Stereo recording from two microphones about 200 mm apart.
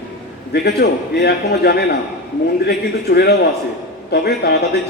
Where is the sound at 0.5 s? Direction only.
55° left (ahead or behind).